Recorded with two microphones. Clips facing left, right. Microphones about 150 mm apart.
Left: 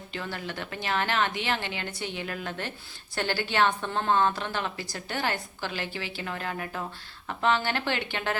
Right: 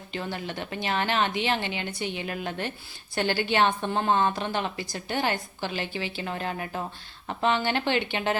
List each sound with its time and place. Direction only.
0.1 s a woman's voice: 20° right (ahead or behind)